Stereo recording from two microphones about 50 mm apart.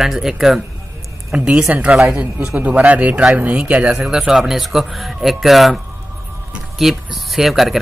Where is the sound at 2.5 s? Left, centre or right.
Right.